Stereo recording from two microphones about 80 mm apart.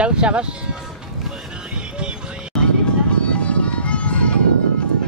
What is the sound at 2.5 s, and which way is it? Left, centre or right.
Music, centre.